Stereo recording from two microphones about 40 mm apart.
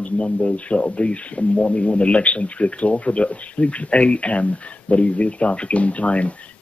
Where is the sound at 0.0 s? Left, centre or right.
Left.